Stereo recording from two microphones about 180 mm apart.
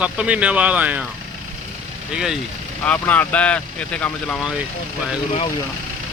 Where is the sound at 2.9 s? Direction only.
10° left (ahead or behind).